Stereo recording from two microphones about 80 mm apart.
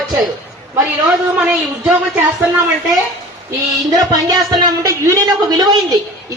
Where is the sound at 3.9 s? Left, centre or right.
Right.